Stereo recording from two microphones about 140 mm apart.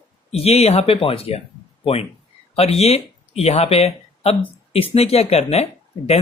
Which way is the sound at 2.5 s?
45° left (ahead or behind).